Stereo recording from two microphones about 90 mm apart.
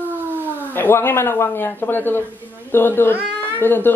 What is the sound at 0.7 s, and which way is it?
A man's voice, 25° left (ahead or behind).